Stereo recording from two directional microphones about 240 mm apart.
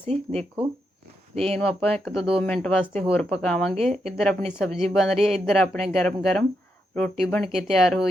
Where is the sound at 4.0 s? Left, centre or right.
Centre.